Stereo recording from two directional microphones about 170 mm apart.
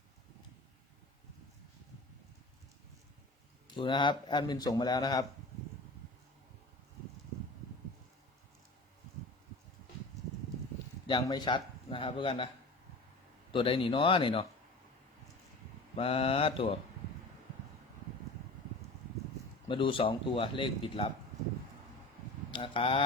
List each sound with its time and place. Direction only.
3.7 s speech: 30° left (ahead or behind)
11.0 s speech: 25° left (ahead or behind)
13.5 s speech: 30° left (ahead or behind)
16.0 s speech: 35° left (ahead or behind)
19.6 s speech: 30° left (ahead or behind)
22.5 s speech: 30° left (ahead or behind)